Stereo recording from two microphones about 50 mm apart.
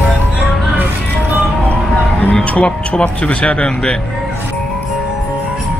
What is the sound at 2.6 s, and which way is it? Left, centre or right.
Speech, left.